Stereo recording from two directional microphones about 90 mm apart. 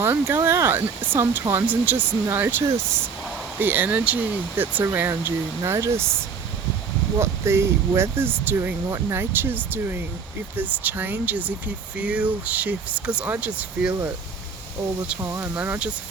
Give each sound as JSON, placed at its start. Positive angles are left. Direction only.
{"t": 0.0, "sound": "speech", "side_deg": -25}
{"t": 15.2, "sound": "speech", "side_deg": -30}
{"t": 15.5, "sound": "speech", "side_deg": -15}